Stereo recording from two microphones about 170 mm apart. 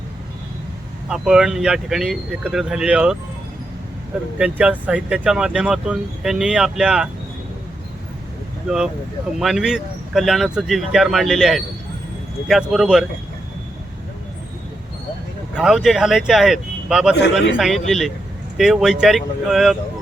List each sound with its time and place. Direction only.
1.0 s speech: 5° right (ahead or behind)
4.4 s speech: 5° right (ahead or behind)
9.4 s speech: centre (ahead or behind)
15.5 s speech: 5° right (ahead or behind)